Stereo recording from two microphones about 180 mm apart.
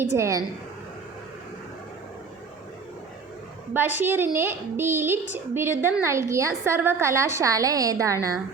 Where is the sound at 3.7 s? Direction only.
10° right (ahead or behind).